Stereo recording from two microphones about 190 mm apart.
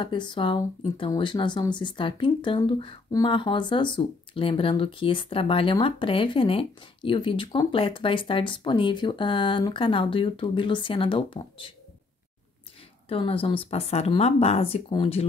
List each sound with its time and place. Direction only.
0.0 s speech: 25° left (ahead or behind)
13.1 s speech: 30° left (ahead or behind)